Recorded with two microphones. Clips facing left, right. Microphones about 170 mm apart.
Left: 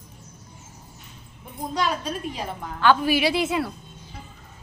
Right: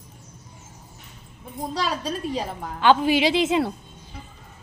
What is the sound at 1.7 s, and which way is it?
Speech, 35° right (ahead or behind).